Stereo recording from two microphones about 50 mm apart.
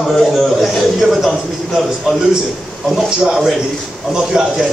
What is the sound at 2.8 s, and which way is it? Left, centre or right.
A man's voice, centre.